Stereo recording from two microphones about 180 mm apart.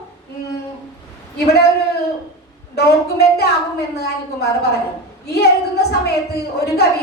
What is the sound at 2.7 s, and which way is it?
Speech, 65° left (ahead or behind).